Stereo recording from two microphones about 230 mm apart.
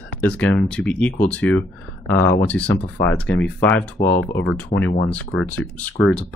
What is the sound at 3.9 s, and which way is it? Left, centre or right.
Speech, left.